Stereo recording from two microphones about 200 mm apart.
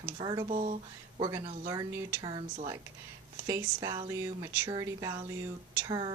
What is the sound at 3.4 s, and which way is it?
Speech, 15° right (ahead or behind).